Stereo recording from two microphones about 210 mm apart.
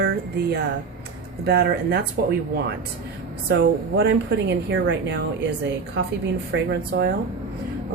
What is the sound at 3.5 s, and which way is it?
Speech, 55° right (ahead or behind).